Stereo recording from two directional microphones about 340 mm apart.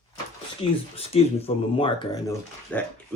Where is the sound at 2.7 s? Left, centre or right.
Centre.